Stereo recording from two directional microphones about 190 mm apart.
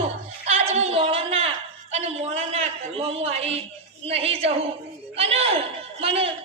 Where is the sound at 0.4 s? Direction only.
35° right (ahead or behind).